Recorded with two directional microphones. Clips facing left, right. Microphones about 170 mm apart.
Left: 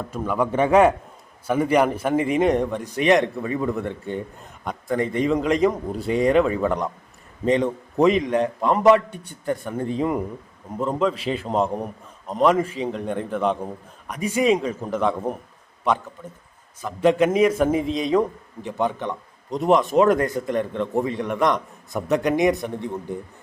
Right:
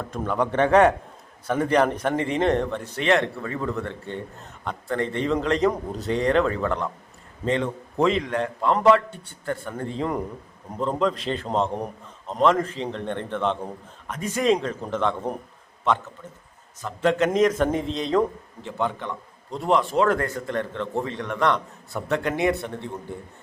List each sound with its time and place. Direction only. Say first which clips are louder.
0.0 s a man's voice: left 1 dB; 5° left (ahead or behind)
16.8 s a man's voice: left 3 dB; 15° left (ahead or behind)